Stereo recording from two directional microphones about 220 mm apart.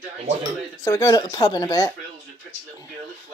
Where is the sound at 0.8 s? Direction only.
15° left (ahead or behind).